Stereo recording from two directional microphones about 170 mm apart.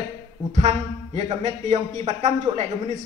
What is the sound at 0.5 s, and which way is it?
Speech, 45° right (ahead or behind).